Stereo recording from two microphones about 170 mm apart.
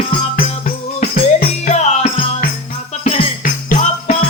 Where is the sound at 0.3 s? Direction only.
50° left (ahead or behind).